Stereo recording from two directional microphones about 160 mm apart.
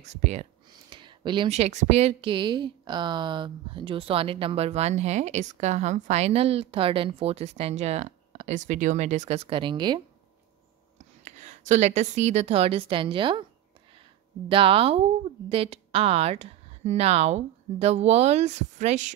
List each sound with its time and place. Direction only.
0.0 s speech: 45° right (ahead or behind)
0.8 s a sound: 30° right (ahead or behind)
1.5 s speech: 45° right (ahead or behind); by 9.9 s 30° right (ahead or behind)
11.2 s speech: 45° right (ahead or behind); by 13.5 s 30° right (ahead or behind)
14.5 s speech: 35° right (ahead or behind)